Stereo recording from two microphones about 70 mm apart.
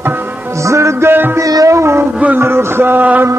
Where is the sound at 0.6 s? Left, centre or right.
Right.